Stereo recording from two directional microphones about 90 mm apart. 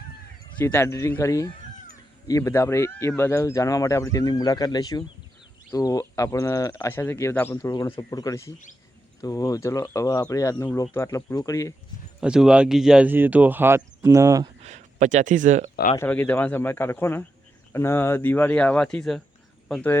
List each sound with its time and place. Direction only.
0.6 s speech: 30° left (ahead or behind)
7.5 s speech: 40° left (ahead or behind)
10.5 s speech: 20° left (ahead or behind)
10.9 s speech: 35° left (ahead or behind)
12.2 s speech: 10° right (ahead or behind)
13.1 s speech: 20° right (ahead or behind)
16.0 s speech: 20° left (ahead or behind)